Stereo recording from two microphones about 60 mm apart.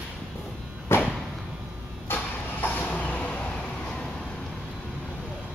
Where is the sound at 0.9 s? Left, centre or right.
Left.